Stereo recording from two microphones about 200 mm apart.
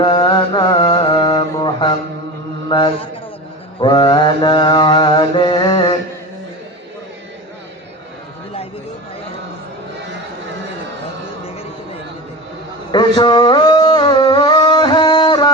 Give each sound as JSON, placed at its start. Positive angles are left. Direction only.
{"t": 0.0, "sound": "mantra", "side_deg": 25}
{"t": 12.9, "sound": "music", "side_deg": 25}